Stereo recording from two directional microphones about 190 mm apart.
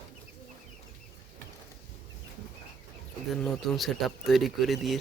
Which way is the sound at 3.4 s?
Centre (ahead or behind).